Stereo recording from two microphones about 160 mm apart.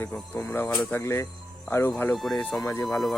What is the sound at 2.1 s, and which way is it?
Speech, centre (ahead or behind).